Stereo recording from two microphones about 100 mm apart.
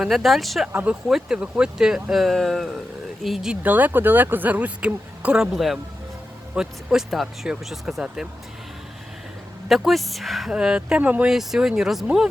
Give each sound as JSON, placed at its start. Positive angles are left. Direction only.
{"t": 0.0, "sound": "speech", "side_deg": 0}
{"t": 0.7, "sound": "speech", "side_deg": -15}
{"t": 1.0, "sound": "speech", "side_deg": -5}
{"t": 3.6, "sound": "speech", "side_deg": -15}
{"t": 9.6, "sound": "speech", "side_deg": 0}